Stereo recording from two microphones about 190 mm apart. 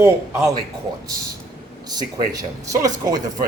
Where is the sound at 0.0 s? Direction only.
20° right (ahead or behind).